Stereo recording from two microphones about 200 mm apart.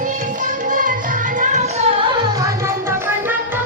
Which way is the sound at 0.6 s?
40° right (ahead or behind).